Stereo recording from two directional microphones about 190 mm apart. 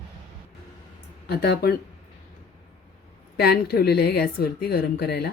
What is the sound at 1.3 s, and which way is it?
Speech, 55° left (ahead or behind).